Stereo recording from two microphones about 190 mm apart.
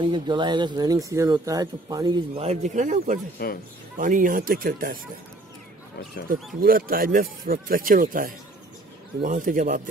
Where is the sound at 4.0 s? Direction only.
45° right (ahead or behind).